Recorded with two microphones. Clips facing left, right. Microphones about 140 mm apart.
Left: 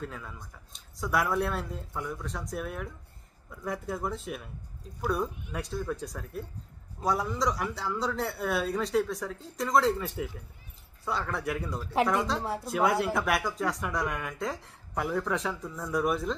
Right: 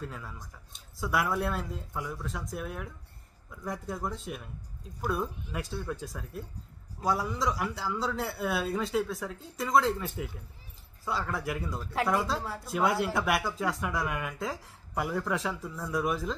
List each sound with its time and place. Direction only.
0.0 s speech: centre (ahead or behind)
12.4 s speech: 25° left (ahead or behind)
12.6 s speech: centre (ahead or behind)